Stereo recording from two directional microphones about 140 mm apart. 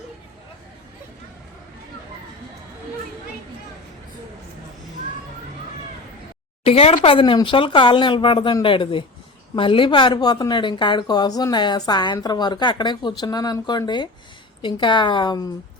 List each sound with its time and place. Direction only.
6.7 s a woman's voice: 45° left (ahead or behind)